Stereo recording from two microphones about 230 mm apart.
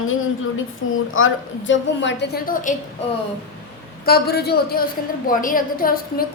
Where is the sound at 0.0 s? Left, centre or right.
Left.